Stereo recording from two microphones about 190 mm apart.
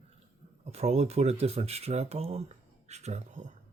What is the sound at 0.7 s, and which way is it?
Speech, 35° right (ahead or behind).